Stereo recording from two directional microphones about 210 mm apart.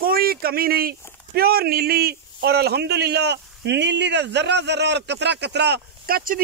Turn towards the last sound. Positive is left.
turn(degrees=-45)  # may be behind; listen again after turning